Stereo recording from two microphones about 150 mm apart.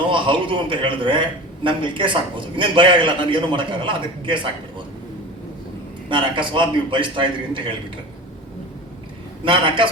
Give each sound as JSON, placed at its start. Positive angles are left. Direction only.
{"t": 0.1, "sound": "a man's voice", "side_deg": -35}
{"t": 6.1, "sound": "a man's voice", "side_deg": -35}
{"t": 9.4, "sound": "a man's voice", "side_deg": -35}